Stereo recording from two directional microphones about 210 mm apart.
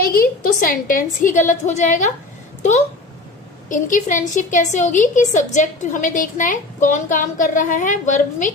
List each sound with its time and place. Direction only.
0.0 s a woman's voice: 45° left (ahead or behind)
3.7 s a woman's voice: 40° left (ahead or behind)